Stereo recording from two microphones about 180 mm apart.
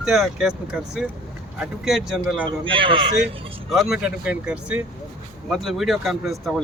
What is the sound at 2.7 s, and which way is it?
Speech, 30° right (ahead or behind).